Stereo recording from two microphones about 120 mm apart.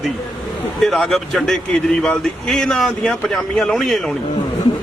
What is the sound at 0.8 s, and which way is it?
Speech, centre (ahead or behind).